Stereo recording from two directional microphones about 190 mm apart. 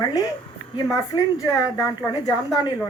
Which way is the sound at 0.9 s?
20° left (ahead or behind).